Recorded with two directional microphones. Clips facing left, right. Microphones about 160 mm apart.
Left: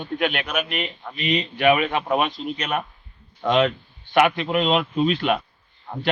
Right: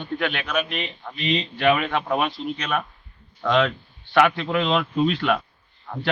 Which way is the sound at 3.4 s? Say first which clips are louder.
Left 1 dB; 20° left (ahead or behind).